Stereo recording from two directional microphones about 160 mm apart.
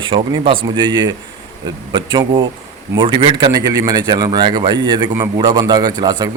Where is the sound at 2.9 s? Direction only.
30° right (ahead or behind).